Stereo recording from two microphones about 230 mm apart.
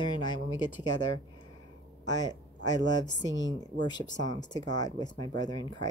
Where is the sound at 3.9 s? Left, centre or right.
Centre.